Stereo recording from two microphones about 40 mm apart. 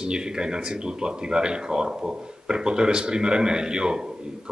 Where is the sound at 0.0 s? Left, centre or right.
Right.